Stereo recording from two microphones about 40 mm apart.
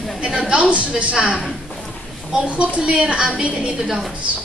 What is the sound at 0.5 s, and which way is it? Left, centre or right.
A woman's voice, right.